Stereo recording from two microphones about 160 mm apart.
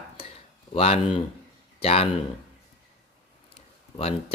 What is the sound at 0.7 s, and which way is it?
Speech, 40° left (ahead or behind).